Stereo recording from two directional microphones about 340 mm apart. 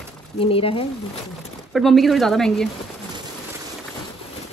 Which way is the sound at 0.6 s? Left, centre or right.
Centre.